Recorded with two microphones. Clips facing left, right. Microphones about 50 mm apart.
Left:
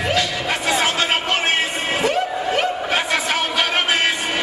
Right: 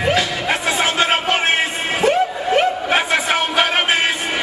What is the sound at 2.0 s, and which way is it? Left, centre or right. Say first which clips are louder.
Snicker: right 6 dB; right.